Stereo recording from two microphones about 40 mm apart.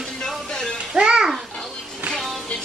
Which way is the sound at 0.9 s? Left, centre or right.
Right.